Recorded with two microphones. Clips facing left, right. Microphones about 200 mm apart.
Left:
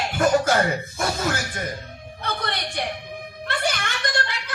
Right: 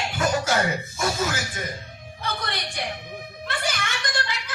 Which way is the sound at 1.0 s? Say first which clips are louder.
Even; 60° left (ahead or behind).